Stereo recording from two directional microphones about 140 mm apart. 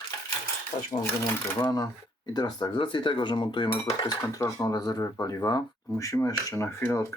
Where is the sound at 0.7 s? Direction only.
45° left (ahead or behind).